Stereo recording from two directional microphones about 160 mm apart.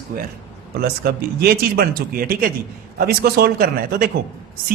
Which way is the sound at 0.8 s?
70° right (ahead or behind).